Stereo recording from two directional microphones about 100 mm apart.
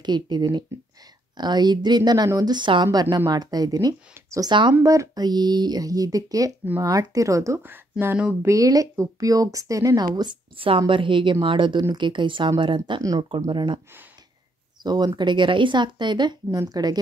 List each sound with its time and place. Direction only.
0.0 s speech: 45° right (ahead or behind)
2.5 s speech: 50° right (ahead or behind); by 7.6 s 30° right (ahead or behind)
8.2 s speech: 20° right (ahead or behind)
8.5 s speech: 35° right (ahead or behind)
10.8 s a woman's voice: 55° right (ahead or behind)
14.8 s speech: 45° right (ahead or behind)